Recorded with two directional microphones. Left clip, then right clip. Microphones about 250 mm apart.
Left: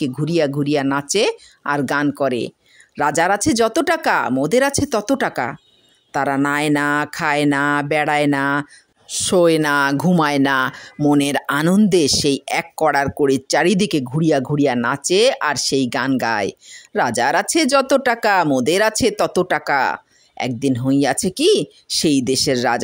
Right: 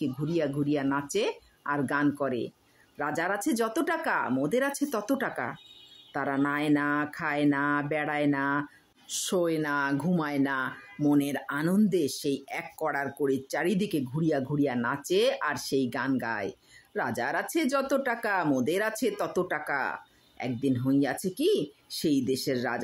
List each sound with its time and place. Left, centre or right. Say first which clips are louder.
0.0 s speech: left 11 dB; left